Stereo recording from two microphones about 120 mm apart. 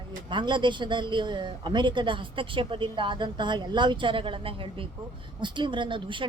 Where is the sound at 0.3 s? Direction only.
40° right (ahead or behind).